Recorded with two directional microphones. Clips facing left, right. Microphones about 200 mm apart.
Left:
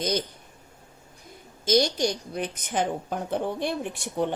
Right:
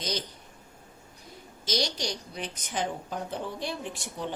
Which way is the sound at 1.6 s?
50° left (ahead or behind).